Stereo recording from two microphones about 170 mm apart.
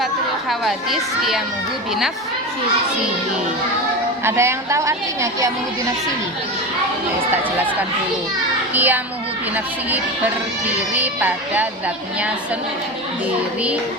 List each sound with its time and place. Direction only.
0.6 s speech: centre (ahead or behind)
4.2 s a woman's voice: 15° right (ahead or behind)
8.7 s a child's voice: 10° right (ahead or behind)
10.7 s a woman's voice: 10° right (ahead or behind)